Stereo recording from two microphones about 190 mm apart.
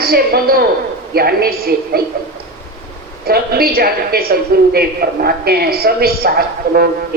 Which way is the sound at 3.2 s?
55° right (ahead or behind).